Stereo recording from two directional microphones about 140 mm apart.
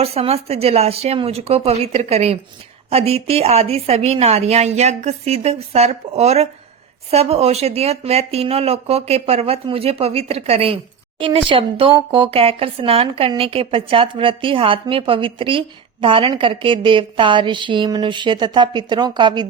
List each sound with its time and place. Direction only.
0.0 s a woman's voice: 45° right (ahead or behind)